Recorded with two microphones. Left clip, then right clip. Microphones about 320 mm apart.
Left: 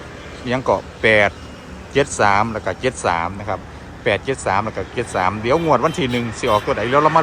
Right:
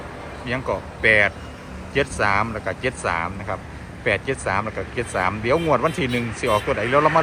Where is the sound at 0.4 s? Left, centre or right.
Centre.